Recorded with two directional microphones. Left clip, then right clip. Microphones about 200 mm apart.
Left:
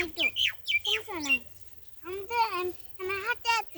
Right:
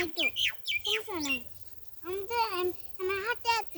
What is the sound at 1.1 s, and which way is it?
A child's voice, 10° right (ahead or behind).